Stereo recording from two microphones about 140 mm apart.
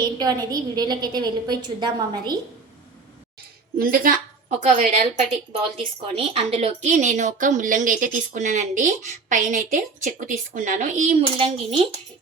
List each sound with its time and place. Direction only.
0.2 s a woman's voice: 30° right (ahead or behind)
3.8 s a woman's voice: 90° right
4.4 s a woman's voice: 65° right (ahead or behind)
5.7 s a woman's voice: 40° right (ahead or behind); by 11.2 s 60° right (ahead or behind)
11.3 s speech: 35° right (ahead or behind)